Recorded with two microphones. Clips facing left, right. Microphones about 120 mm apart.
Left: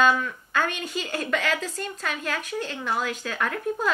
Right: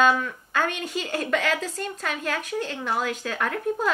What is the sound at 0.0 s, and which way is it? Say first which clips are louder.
A woman's voice: right 1 dB; 40° right (ahead or behind).